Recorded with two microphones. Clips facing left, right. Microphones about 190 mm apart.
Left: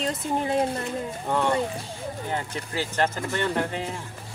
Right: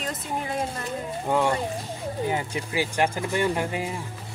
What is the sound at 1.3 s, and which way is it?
Speech, 10° right (ahead or behind).